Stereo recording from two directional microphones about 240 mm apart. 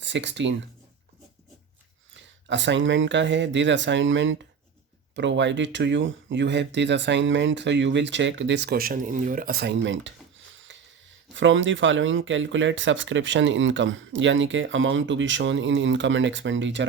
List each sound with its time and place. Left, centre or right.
0.0 s speech: right
2.1 s speech: right
10.7 s a sound: right
11.3 s speech: right